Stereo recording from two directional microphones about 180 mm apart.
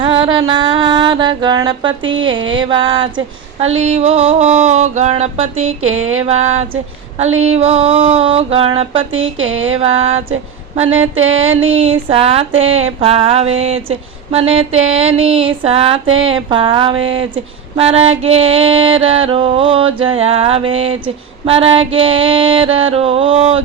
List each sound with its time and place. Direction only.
0.0 s a sound: 30° right (ahead or behind)
3.6 s female singing: 35° right (ahead or behind)
9.1 s speech: 90° right
9.8 s female singing: 35° right (ahead or behind)